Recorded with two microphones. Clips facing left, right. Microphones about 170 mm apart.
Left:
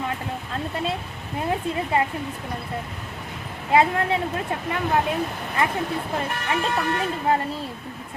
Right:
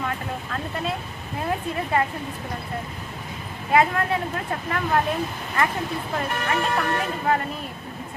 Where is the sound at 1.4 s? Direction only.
20° left (ahead or behind).